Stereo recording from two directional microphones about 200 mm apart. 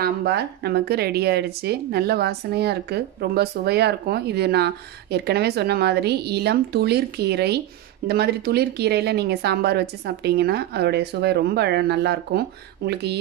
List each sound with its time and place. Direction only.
0.0 s a woman's voice: 55° right (ahead or behind)